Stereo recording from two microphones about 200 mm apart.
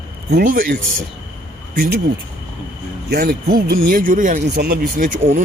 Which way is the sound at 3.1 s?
50° right (ahead or behind).